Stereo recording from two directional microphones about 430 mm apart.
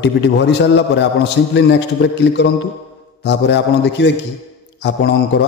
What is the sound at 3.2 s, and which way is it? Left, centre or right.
A man's voice, left.